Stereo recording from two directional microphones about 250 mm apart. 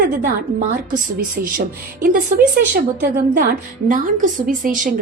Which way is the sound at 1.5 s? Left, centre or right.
Right.